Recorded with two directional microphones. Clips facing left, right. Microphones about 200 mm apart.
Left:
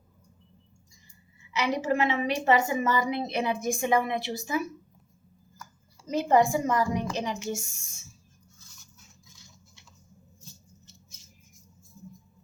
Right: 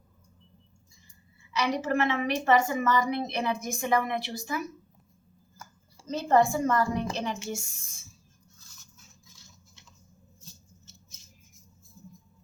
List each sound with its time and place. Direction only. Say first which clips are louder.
1.5 s a woman's voice: left 1 dB; 15° left (ahead or behind)
6.1 s a woman's voice: left 1 dB; 15° left (ahead or behind)